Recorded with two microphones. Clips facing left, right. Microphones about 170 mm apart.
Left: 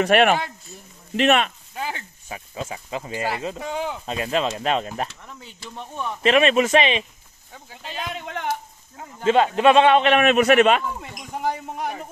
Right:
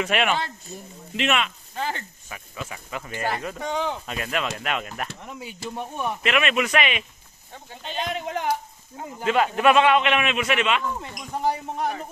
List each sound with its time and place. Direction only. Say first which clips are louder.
0.0 s speech: left 6 dB; 50° left (ahead or behind)
1.8 s speech: right 1 dB; 10° left (ahead or behind)
2.2 s speech: left 8 dB; 25° left (ahead or behind)
5.2 s speech: right 6 dB; 15° right (ahead or behind)
6.2 s speech: left 7 dB; 30° left (ahead or behind)
7.8 s speech: right 3 dB; 5° left (ahead or behind)
9.2 s a man's voice: left 3 dB; 25° left (ahead or behind); by 10.8 s 45° left (ahead or behind)